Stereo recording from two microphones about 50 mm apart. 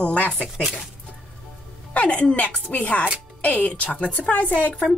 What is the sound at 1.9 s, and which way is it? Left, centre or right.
A woman's voice, left.